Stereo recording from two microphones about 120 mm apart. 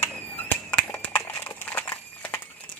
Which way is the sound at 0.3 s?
15° left (ahead or behind).